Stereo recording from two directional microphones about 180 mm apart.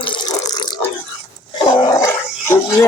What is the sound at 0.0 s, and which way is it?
Water, 25° left (ahead or behind).